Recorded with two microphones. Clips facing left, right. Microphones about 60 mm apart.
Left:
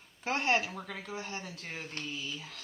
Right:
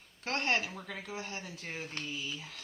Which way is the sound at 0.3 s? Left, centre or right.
Centre.